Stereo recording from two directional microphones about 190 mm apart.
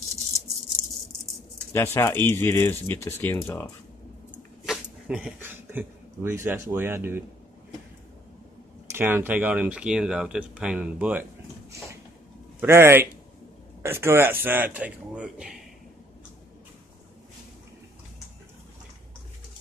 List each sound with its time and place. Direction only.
1.7 s speech: 15° left (ahead or behind)
4.6 s speech: 5° right (ahead or behind)
8.9 s speech: 10° right (ahead or behind)
12.5 s speech: 15° right (ahead or behind)